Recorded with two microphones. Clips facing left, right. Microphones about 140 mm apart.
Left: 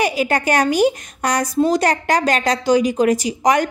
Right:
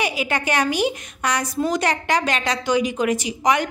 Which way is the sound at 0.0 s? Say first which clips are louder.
Left 5 dB; 40° left (ahead or behind).